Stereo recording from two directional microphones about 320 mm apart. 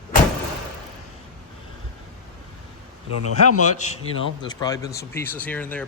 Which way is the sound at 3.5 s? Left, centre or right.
Left.